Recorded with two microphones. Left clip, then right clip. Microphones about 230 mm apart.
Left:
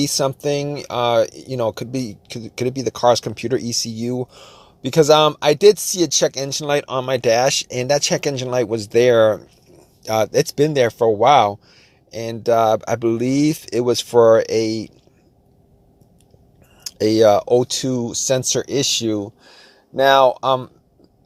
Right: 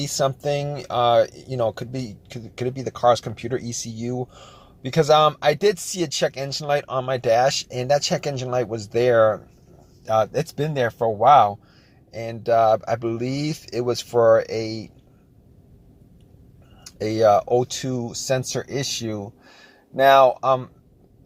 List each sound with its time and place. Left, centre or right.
0.0 s speech: left
16.8 s speech: left